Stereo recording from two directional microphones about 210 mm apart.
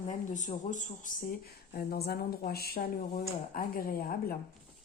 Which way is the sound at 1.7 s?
45° left (ahead or behind).